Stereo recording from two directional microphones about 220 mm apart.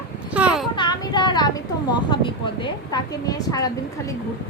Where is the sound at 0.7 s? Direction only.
20° left (ahead or behind).